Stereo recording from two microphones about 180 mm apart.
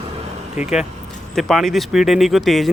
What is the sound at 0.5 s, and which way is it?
Speech, 5° right (ahead or behind).